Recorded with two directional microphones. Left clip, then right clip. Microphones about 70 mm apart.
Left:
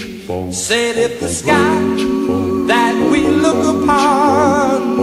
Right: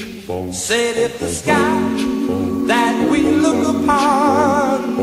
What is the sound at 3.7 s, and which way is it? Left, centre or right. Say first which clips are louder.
Music: left 2 dB; right.